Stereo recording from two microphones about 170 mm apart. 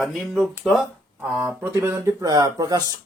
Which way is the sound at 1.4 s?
15° right (ahead or behind).